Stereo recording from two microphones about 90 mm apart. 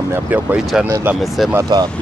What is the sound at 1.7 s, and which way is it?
Speech, 55° right (ahead or behind).